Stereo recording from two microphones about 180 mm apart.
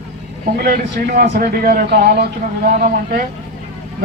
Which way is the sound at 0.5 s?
60° right (ahead or behind).